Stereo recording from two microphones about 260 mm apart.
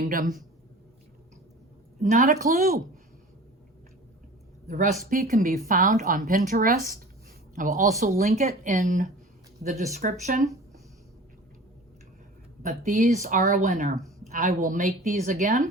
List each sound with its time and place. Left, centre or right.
0.0 s speech: right
2.0 s a woman's voice: right
4.7 s a woman's voice: right
12.6 s a woman's voice: right